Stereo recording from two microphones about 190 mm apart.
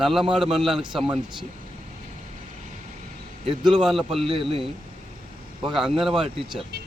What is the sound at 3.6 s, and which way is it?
A man's voice, centre (ahead or behind).